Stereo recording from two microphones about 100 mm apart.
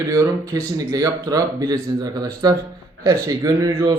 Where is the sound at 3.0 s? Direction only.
25° right (ahead or behind).